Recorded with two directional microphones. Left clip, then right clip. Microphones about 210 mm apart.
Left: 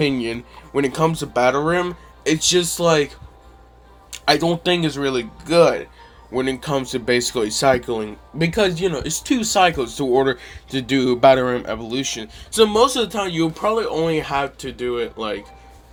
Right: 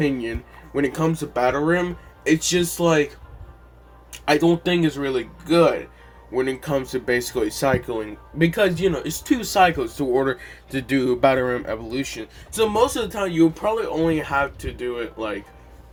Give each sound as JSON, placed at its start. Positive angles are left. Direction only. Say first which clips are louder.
{"t": 0.0, "sound": "speech", "louder": "left 3 dB", "side_deg": 35}
{"t": 4.1, "sound": "speech", "louder": "left 1 dB", "side_deg": 35}
{"t": 12.5, "sound": "speech", "louder": "left 4 dB", "side_deg": 40}